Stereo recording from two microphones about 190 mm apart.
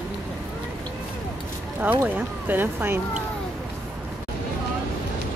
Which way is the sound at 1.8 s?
10° right (ahead or behind).